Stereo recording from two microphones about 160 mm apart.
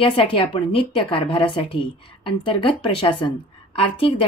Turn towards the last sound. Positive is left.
turn(degrees=35)  # may be behind; listen again after turning